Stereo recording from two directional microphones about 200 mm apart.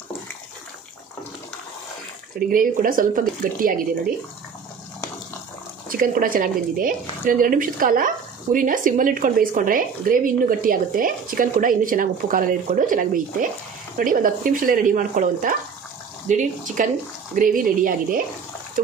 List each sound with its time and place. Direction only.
2.3 s a woman's voice: 45° right (ahead or behind)
5.9 s a woman's voice: 45° right (ahead or behind)